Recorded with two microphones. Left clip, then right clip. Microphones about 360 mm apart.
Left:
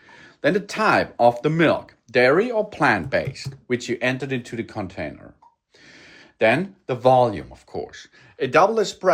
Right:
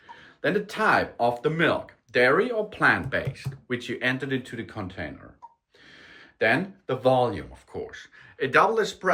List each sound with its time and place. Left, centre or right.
0.2 s speech: centre